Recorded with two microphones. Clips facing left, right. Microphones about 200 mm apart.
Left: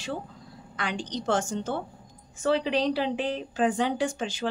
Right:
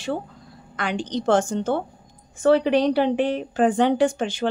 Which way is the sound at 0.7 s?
55° right (ahead or behind).